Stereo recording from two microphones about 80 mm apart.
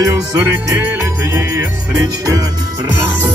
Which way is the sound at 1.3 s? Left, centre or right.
Right.